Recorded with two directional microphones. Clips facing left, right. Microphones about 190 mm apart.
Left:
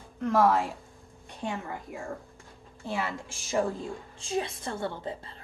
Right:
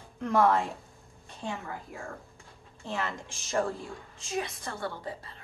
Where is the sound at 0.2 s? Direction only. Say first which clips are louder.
Left 1 dB; centre (ahead or behind).